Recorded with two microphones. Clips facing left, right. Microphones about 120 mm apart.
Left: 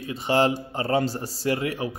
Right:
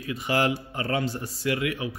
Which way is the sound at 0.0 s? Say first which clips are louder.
Left 3 dB; 30° left (ahead or behind).